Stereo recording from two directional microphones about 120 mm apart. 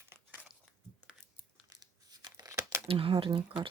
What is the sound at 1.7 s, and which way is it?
Tearing, 35° right (ahead or behind).